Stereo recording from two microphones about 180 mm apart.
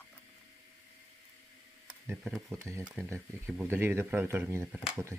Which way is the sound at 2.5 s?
15° right (ahead or behind).